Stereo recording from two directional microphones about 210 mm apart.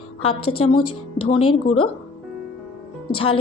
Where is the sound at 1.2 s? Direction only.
25° left (ahead or behind).